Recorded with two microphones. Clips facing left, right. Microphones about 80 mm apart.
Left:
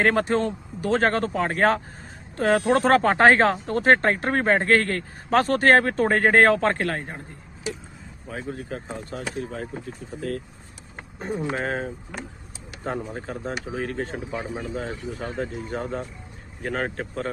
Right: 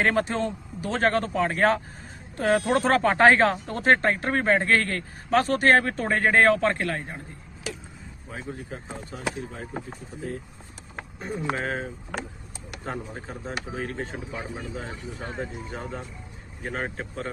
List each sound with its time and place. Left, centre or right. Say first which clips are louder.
0.0 s speech: left 3 dB; left
8.3 s speech: left 4 dB; left
10.2 s speech: left 4 dB; left
11.5 s speech: left 2 dB; left